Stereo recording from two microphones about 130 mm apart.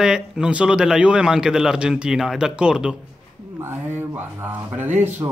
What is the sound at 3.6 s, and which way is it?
Speech, 15° right (ahead or behind).